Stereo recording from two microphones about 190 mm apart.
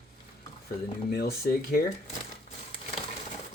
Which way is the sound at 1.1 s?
55° left (ahead or behind).